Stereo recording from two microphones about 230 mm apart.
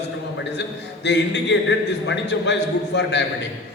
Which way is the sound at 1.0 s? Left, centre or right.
Left.